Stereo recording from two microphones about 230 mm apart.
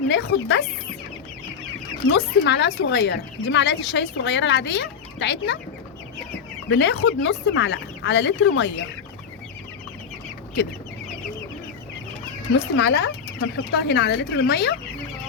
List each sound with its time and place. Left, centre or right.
0.1 s a woman's voice: left
2.0 s a woman's voice: left
6.7 s a woman's voice: left
12.5 s a woman's voice: left